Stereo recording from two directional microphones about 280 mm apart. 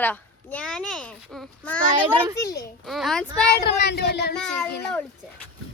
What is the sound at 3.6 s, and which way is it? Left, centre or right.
Speech, left.